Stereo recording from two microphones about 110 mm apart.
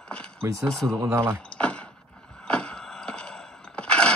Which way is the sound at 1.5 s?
10° left (ahead or behind).